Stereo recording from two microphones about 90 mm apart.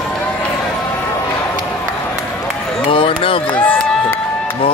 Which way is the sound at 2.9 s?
80° left.